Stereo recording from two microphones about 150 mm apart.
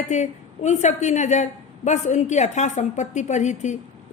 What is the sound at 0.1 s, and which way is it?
A man's voice, 50° left (ahead or behind).